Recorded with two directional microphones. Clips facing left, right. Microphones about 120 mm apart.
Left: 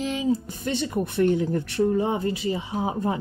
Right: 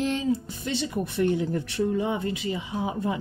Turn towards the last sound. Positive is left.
turn(degrees=35)  # may be behind; listen again after turning